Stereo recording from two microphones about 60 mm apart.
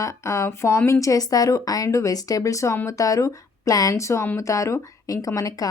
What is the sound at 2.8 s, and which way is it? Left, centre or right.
Speech, left.